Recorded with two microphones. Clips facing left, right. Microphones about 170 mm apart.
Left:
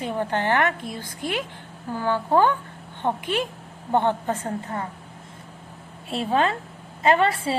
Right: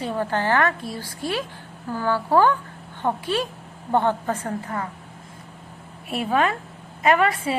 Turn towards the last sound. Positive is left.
turn(degrees=30)  # may be behind; listen again after turning